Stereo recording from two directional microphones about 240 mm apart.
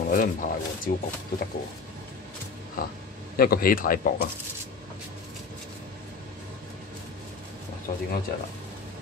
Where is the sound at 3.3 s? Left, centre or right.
Left.